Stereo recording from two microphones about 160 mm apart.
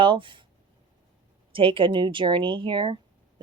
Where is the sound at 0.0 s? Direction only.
30° right (ahead or behind).